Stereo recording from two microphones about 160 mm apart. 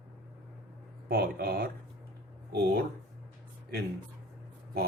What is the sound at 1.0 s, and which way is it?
Speech, 70° right (ahead or behind).